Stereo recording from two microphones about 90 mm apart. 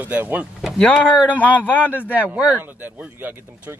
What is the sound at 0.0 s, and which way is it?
Speech, 20° right (ahead or behind).